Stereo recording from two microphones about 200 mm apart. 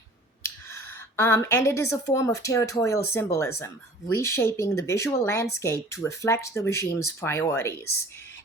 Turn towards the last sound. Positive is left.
turn(degrees=15)  # may be behind; listen again after turning